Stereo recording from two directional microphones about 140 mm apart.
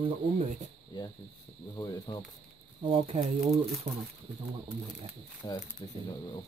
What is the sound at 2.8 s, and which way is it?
Speech, 40° right (ahead or behind).